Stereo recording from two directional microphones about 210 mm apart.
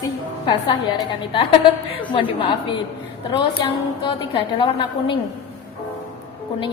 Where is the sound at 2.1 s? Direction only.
25° left (ahead or behind).